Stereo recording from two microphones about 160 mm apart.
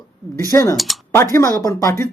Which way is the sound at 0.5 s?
20° left (ahead or behind).